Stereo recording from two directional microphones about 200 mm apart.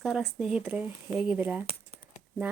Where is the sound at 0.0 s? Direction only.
Centre (ahead or behind).